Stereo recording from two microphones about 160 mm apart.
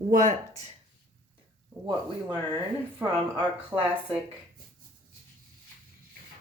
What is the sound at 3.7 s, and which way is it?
Speech, 15° right (ahead or behind).